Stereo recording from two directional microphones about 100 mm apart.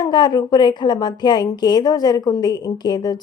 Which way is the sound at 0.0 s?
45° left (ahead or behind).